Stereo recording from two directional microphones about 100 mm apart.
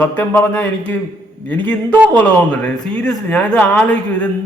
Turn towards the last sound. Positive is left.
turn(degrees=15)  # may be behind; listen again after turning